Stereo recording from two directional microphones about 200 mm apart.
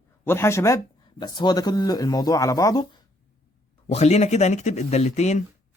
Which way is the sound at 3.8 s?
30° left (ahead or behind).